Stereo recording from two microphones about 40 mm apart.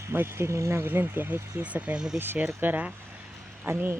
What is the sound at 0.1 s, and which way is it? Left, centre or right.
Speech, right.